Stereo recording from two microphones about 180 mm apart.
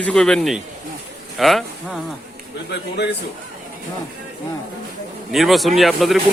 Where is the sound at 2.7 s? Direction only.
65° left (ahead or behind).